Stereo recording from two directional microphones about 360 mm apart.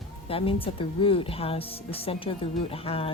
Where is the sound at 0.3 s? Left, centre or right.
Centre.